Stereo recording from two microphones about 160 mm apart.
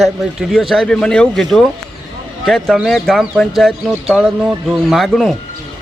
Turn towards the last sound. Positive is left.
turn(degrees=0)  # may be behind; listen again after turning